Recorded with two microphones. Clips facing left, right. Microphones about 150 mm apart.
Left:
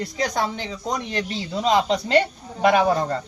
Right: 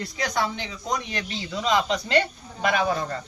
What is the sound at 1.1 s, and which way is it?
Speech, 30° left (ahead or behind).